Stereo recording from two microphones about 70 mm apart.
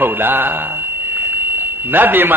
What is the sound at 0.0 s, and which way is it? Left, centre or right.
A man's voice, right.